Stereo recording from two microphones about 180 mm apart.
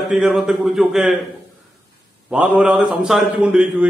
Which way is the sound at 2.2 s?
5° right (ahead or behind).